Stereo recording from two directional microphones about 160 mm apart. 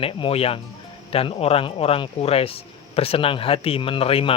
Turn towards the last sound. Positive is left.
turn(degrees=35)  # may be behind; listen again after turning